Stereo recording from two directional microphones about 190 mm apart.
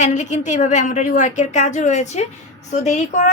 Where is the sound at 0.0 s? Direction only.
40° left (ahead or behind).